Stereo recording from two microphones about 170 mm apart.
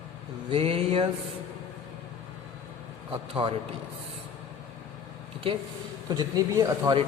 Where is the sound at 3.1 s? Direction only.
30° right (ahead or behind).